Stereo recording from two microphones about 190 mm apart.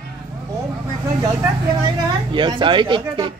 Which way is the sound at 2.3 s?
25° right (ahead or behind).